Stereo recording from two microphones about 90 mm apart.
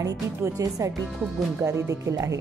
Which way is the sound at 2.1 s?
35° right (ahead or behind).